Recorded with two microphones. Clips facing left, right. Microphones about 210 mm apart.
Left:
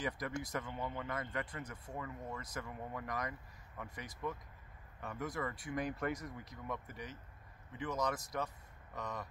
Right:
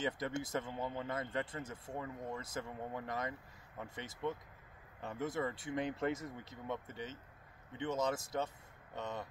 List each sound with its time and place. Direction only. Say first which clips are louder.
0.0 s speech: right 2 dB; 25° right (ahead or behind)